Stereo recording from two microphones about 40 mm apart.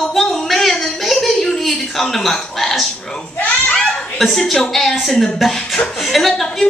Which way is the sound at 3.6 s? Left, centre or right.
Left.